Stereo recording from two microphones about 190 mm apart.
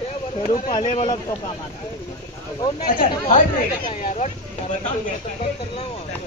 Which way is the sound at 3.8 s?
45° left (ahead or behind).